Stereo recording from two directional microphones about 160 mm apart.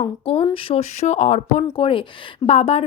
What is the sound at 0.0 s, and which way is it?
A woman's voice, 35° left (ahead or behind).